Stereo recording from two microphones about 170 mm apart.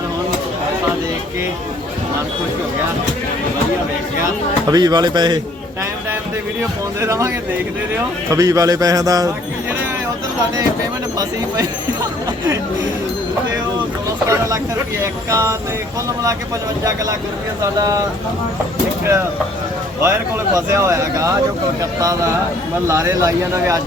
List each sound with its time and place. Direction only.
4.7 s a man's voice: 25° right (ahead or behind)
7.0 s speech: 15° right (ahead or behind)
8.3 s a man's voice: 20° right (ahead or behind)
15.0 s speech: 20° right (ahead or behind)
17.6 s a man's voice: 20° right (ahead or behind)
20.0 s a man's voice: 15° right (ahead or behind)